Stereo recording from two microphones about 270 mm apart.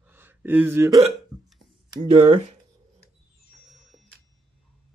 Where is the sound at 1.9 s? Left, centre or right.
Centre.